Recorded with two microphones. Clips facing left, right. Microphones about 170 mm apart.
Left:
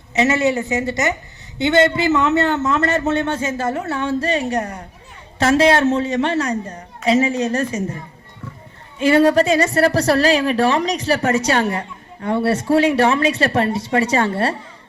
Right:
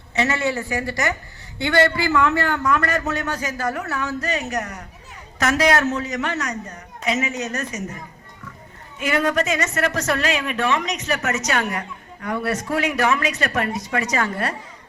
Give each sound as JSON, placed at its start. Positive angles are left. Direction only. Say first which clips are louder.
{"t": 0.1, "sound": "a woman's voice", "louder": "left 5 dB", "side_deg": 20}